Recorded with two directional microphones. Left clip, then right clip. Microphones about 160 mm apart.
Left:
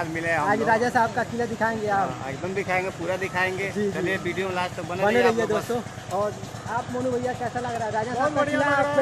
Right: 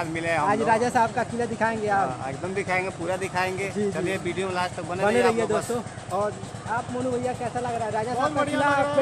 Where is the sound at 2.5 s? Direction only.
15° right (ahead or behind).